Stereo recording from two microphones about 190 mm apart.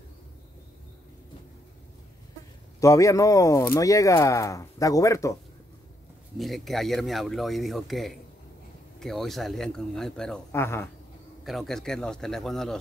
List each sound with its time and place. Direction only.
2.8 s speech: 15° left (ahead or behind)
6.3 s speech: centre (ahead or behind)
11.4 s speech: centre (ahead or behind)